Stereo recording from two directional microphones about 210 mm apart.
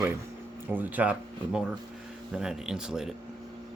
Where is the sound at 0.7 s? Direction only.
10° right (ahead or behind).